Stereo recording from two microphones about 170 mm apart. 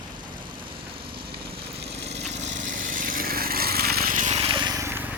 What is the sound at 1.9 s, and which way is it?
Lawn mower, 80° right.